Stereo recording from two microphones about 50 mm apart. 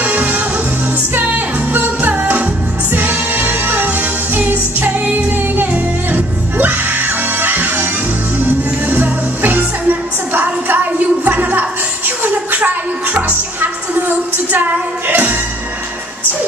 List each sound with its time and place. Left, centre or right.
0.0 s music: right
9.8 s a sound: right
12.2 s music: right